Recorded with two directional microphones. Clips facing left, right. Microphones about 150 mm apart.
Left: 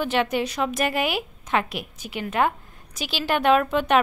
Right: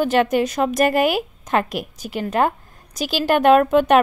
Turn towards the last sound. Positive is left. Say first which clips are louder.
# right 6 dB
turn(degrees=-45)  # may be behind; listen again after turning